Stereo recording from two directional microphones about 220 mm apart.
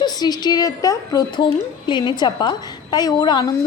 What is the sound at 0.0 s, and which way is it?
A woman's voice, 20° left (ahead or behind).